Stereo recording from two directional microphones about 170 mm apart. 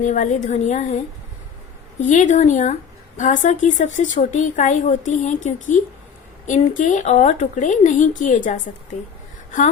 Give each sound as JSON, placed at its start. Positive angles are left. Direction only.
{"t": 0.0, "sound": "speech", "side_deg": 50}
{"t": 2.0, "sound": "speech", "side_deg": 45}